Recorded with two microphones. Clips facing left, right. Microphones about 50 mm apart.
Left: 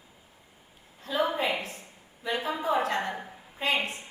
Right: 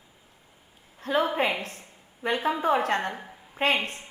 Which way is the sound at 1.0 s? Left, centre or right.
Right.